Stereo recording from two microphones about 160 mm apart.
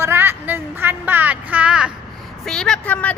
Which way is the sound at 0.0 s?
15° right (ahead or behind).